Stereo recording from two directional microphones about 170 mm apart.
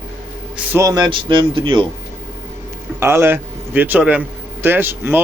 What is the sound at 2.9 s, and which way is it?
A man's voice, 15° right (ahead or behind).